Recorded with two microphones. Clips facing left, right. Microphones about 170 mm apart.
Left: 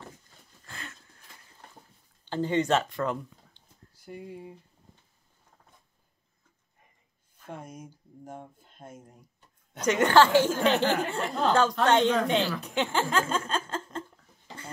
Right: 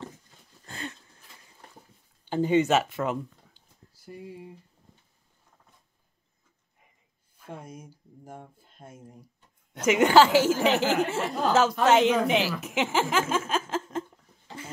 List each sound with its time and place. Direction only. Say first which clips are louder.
0.7 s a sound: right 7 dB; 25° right (ahead or behind)
2.2 s speech: right 4 dB; 10° right (ahead or behind)
8.8 s speech: left 1 dB; 25° left (ahead or behind)
9.8 s speech: right 2 dB; 10° right (ahead or behind)